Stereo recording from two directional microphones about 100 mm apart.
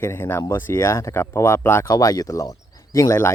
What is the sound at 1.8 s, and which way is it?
Speech, 35° left (ahead or behind).